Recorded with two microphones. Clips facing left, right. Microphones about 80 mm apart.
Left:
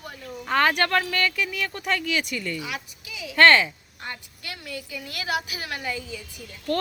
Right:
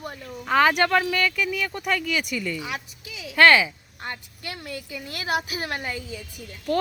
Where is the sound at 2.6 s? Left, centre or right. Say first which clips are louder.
Right 1 dB; right.